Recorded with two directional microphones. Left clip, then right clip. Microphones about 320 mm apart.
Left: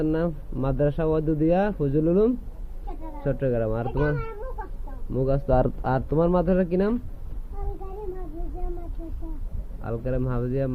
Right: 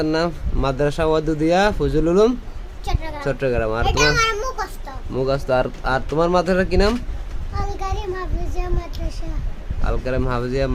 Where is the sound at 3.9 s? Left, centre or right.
Centre.